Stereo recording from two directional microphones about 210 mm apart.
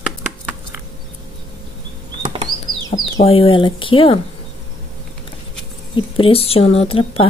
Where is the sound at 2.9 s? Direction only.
25° left (ahead or behind).